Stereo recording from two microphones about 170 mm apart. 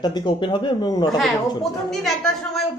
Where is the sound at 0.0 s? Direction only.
25° left (ahead or behind).